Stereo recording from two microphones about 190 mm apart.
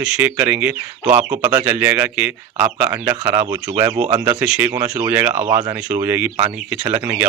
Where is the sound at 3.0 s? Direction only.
20° right (ahead or behind).